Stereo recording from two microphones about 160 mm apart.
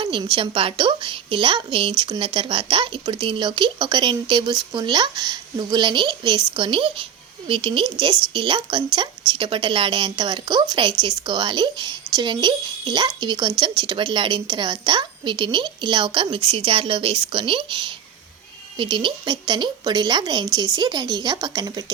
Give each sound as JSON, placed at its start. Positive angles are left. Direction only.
{"t": 0.0, "sound": "a woman's voice", "side_deg": -30}
{"t": 18.8, "sound": "speech", "side_deg": -30}